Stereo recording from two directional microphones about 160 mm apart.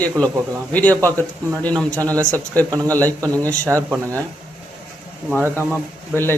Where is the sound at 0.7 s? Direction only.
10° left (ahead or behind).